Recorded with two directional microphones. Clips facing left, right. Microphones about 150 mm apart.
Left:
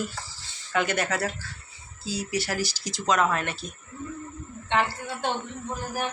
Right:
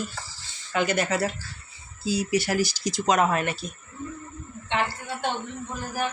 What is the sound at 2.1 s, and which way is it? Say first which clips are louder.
Speech: right 5 dB; 15° right (ahead or behind).